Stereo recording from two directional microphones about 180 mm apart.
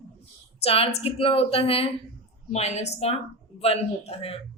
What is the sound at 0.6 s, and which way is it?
Speech, 30° left (ahead or behind).